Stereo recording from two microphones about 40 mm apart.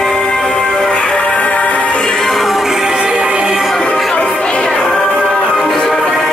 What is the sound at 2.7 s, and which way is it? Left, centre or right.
Music, centre.